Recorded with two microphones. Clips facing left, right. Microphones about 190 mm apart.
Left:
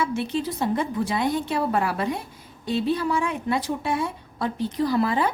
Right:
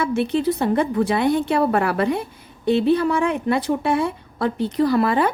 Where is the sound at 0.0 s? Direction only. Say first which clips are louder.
Right 6 dB; 60° right (ahead or behind).